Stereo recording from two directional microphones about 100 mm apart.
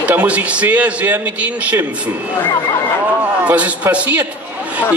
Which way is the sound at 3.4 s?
15° right (ahead or behind).